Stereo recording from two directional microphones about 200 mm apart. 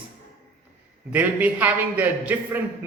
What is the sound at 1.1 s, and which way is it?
A man's voice, 10° right (ahead or behind).